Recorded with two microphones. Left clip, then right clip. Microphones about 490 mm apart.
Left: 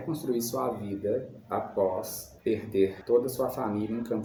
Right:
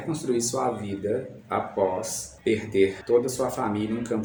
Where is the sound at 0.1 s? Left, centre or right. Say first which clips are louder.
Right 4 dB; left.